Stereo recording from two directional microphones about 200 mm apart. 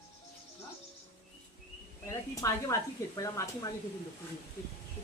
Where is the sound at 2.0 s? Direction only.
15° left (ahead or behind).